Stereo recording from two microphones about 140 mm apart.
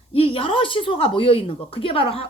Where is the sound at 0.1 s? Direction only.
40° left (ahead or behind).